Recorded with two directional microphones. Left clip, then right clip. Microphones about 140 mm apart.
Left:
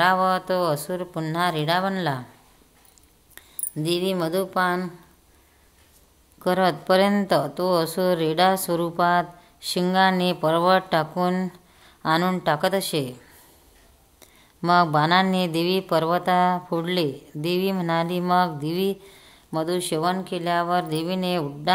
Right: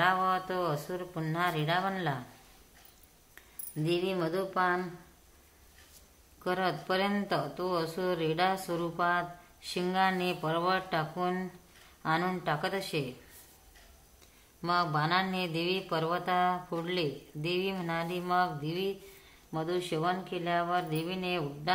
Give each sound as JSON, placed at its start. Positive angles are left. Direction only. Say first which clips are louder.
{"t": 0.0, "sound": "speech", "louder": "left 8 dB", "side_deg": 45}
{"t": 3.7, "sound": "speech", "louder": "left 7 dB", "side_deg": 40}
{"t": 6.4, "sound": "speech", "louder": "left 10 dB", "side_deg": 50}
{"t": 14.2, "sound": "speech", "louder": "left 10 dB", "side_deg": 55}